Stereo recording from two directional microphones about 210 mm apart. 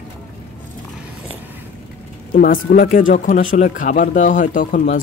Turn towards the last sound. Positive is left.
turn(degrees=40)  # may be behind; listen again after turning